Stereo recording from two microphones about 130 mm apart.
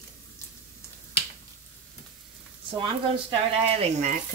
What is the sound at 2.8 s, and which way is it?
Speech, 45° right (ahead or behind).